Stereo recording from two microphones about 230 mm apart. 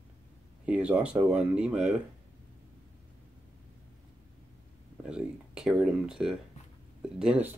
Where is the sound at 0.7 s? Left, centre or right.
Centre.